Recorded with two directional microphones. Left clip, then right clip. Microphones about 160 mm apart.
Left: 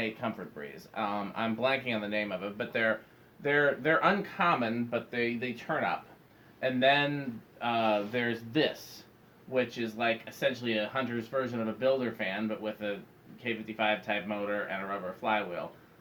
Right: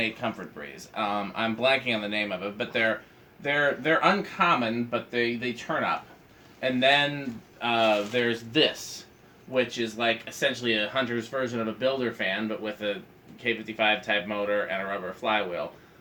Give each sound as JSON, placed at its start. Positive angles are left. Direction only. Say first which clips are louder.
{"t": 0.2, "sound": "speech", "louder": "right 4 dB", "side_deg": 35}